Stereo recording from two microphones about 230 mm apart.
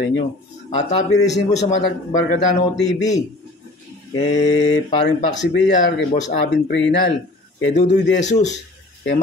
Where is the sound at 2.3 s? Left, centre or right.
Left.